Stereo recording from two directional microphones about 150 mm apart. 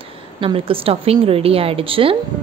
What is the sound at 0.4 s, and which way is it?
A woman's voice, 35° right (ahead or behind).